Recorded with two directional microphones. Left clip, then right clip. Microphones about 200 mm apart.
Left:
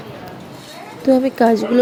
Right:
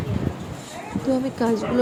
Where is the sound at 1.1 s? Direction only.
30° left (ahead or behind).